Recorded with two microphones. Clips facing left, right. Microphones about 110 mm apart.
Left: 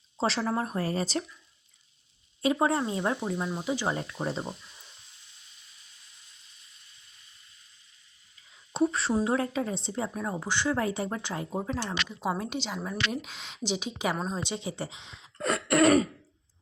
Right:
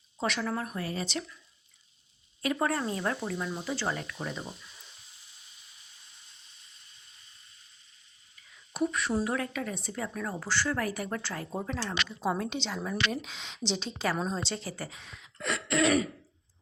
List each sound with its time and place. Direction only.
0.2 s speech: 30° left (ahead or behind)
2.4 s speech: 20° left (ahead or behind)
3.9 s speech: 30° left (ahead or behind)
8.7 s a sound: 30° left (ahead or behind)
9.1 s a woman's voice: 25° left (ahead or behind)
14.2 s a woman's voice: 5° left (ahead or behind)
14.4 s speech: 15° left (ahead or behind)
15.4 s throat clearing: 45° left (ahead or behind)